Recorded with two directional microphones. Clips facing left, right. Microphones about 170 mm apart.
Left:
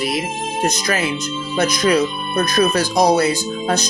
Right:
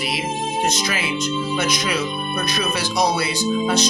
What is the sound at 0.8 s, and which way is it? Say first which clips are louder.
Speech: left 3 dB; 45° left (ahead or behind).